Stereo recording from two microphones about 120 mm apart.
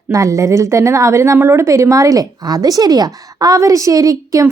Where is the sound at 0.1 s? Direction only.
25° right (ahead or behind).